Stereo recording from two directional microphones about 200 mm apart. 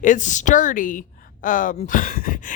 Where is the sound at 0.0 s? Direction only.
40° left (ahead or behind).